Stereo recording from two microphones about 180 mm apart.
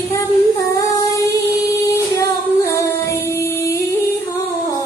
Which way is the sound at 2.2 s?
15° left (ahead or behind).